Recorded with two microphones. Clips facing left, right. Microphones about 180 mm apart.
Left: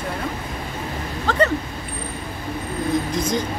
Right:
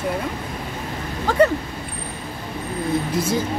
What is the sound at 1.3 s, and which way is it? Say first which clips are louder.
Speech: right 3 dB; 10° right (ahead or behind).